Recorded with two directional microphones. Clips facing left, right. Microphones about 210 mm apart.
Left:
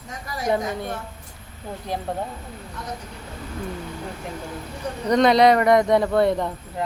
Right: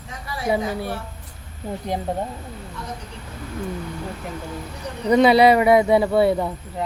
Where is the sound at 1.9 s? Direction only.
20° right (ahead or behind).